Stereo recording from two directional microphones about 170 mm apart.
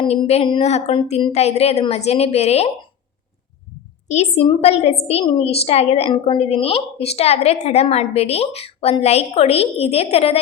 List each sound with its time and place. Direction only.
0.0 s a woman's voice: 35° left (ahead or behind)
4.1 s a woman's voice: 40° left (ahead or behind)